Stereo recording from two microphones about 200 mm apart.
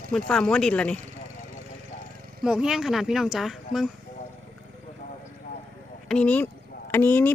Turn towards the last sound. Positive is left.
turn(degrees=10)  # may be behind; listen again after turning